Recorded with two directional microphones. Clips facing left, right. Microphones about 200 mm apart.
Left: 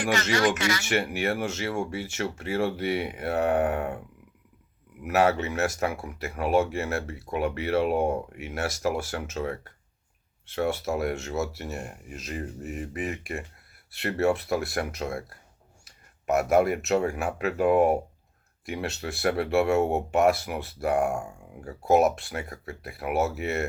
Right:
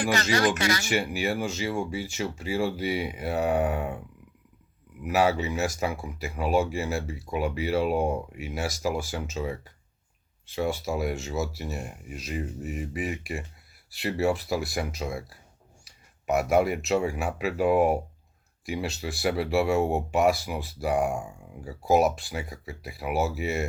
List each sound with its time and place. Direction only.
0.2 s speech: 35° right (ahead or behind)
1.2 s speech: 5° right (ahead or behind)
5.0 s speech: 5° right (ahead or behind)